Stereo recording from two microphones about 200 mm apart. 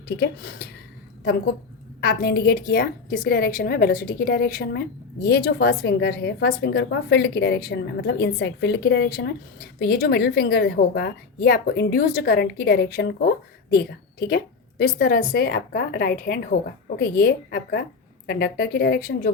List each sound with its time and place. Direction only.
0.2 s a woman's voice: 55° left (ahead or behind)
2.0 s a woman's voice: 50° left (ahead or behind)